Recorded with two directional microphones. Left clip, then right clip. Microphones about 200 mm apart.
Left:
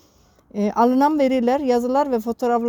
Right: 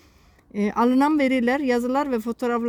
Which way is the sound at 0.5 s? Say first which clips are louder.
Left 3 dB; 45° right (ahead or behind).